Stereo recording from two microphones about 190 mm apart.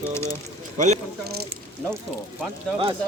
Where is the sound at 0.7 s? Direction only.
40° right (ahead or behind).